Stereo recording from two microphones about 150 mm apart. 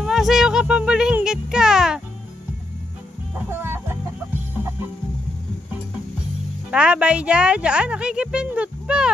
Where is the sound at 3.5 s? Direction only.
15° right (ahead or behind).